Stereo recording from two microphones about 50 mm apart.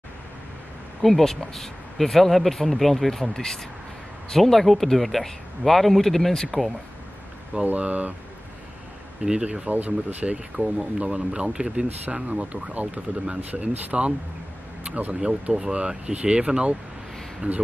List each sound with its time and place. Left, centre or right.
1.0 s speech: centre
7.6 s speech: right
9.2 s speech: centre
9.7 s speech: right
15.1 s speech: centre